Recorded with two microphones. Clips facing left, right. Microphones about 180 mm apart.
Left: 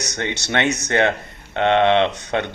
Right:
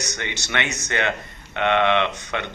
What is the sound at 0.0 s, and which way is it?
Speech, 60° left (ahead or behind).